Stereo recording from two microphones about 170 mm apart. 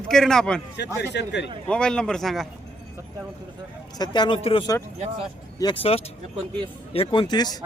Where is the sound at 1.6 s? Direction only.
5° left (ahead or behind).